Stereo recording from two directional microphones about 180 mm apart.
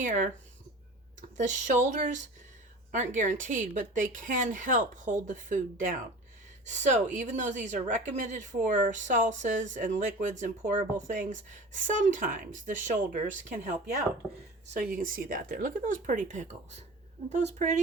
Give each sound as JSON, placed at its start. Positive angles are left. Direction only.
{"t": 0.0, "sound": "a woman's voice", "side_deg": -45}
{"t": 1.4, "sound": "a woman's voice", "side_deg": -45}